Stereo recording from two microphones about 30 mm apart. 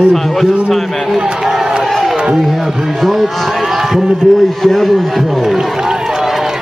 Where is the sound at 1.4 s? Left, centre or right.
Centre.